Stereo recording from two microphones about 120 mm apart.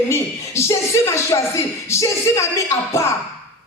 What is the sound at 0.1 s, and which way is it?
A man's voice, 25° left (ahead or behind).